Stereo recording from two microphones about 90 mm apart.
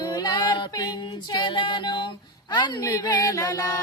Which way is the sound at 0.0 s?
50° left (ahead or behind).